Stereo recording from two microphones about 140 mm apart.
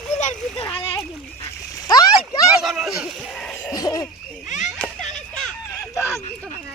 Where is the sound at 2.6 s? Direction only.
Centre (ahead or behind).